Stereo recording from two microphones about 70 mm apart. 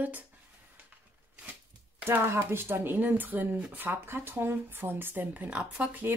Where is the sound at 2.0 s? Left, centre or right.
Right.